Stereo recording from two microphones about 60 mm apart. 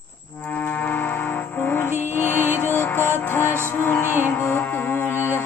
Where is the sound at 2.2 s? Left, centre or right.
Right.